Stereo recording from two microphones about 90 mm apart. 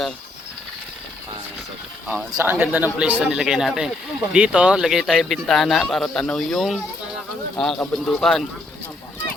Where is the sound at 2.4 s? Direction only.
25° right (ahead or behind); by 8.5 s 5° left (ahead or behind).